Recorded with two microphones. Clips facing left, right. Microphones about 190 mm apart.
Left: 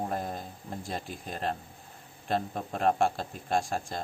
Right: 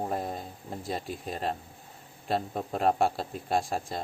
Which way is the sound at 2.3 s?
35° right (ahead or behind).